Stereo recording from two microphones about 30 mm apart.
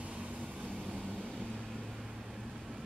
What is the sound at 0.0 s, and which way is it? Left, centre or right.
Vehicle, right.